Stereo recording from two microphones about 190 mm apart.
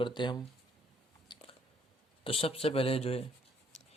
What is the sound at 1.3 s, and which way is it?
Biting, 25° left (ahead or behind).